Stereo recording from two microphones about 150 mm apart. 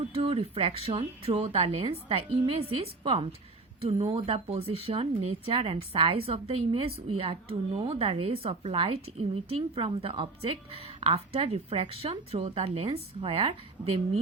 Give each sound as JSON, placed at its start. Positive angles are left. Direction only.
{"t": 0.1, "sound": "speech", "side_deg": -40}